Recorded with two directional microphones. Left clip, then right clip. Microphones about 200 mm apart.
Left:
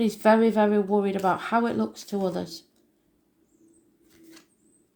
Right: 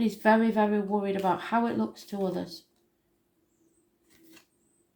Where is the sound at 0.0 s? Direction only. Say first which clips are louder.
Left 4 dB; 35° left (ahead or behind).